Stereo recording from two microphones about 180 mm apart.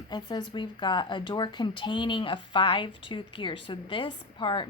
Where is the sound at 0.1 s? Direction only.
25° left (ahead or behind).